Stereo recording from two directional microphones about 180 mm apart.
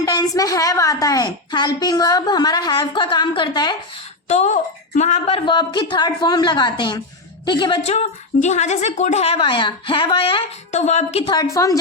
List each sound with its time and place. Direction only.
0.0 s a woman's voice: 20° left (ahead or behind)
4.3 s a woman's voice: 40° left (ahead or behind)
11.5 s a woman's voice: 20° left (ahead or behind)